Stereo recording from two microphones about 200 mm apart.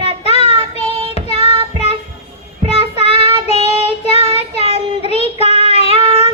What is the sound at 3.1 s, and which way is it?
Child singing, 25° right (ahead or behind).